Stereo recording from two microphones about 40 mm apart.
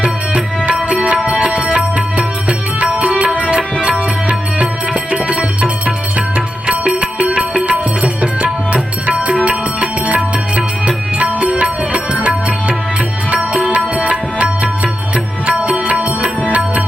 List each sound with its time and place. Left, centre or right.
0.0 s music: right
5.1 s music: right